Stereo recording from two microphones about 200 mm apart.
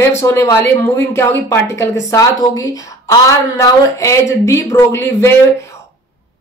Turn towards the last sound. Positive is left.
turn(degrees=15)  # may be behind; listen again after turning